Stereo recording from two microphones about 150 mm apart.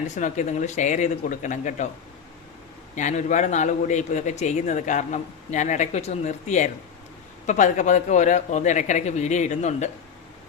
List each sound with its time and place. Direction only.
0.2 s speech: 55° left (ahead or behind)
2.9 s a man's voice: 55° left (ahead or behind)